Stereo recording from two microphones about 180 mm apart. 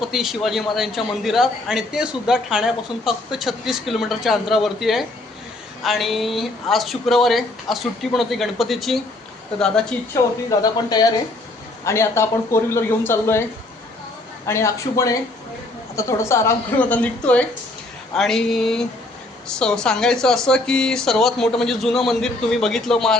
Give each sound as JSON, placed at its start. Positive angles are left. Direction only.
{"t": 0.0, "sound": "a man's voice", "side_deg": 0}
{"t": 10.6, "sound": "speech", "side_deg": 20}
{"t": 14.4, "sound": "a man's voice", "side_deg": 15}